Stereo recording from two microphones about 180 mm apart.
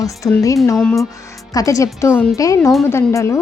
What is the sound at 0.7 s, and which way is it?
Speech, centre (ahead or behind).